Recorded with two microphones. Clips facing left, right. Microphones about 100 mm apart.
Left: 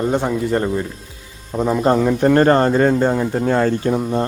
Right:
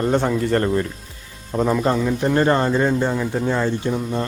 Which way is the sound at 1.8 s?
45° left (ahead or behind).